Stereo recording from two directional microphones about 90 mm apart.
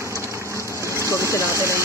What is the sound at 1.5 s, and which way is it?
Speech, 30° right (ahead or behind).